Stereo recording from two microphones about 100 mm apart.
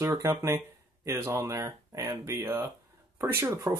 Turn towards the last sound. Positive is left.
turn(degrees=-30)  # may be behind; listen again after turning